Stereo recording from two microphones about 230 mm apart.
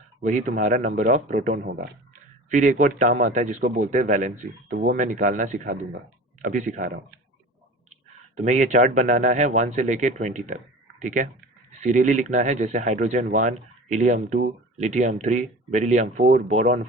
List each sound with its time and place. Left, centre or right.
0.2 s speech: right
8.4 s speech: right